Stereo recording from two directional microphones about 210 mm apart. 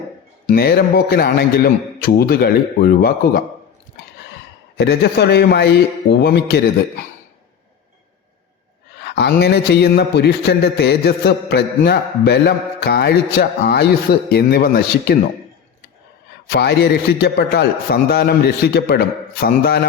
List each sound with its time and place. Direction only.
0.4 s a man's voice: 45° left (ahead or behind)
4.8 s a man's voice: 50° left (ahead or behind)
9.0 s a man's voice: 55° left (ahead or behind)
16.5 s a man's voice: 50° left (ahead or behind)